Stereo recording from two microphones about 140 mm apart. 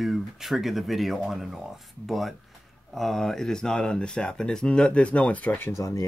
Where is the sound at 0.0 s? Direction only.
Centre (ahead or behind).